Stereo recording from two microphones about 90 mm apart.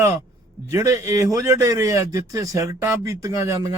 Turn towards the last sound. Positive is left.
turn(degrees=-35)  # may be behind; listen again after turning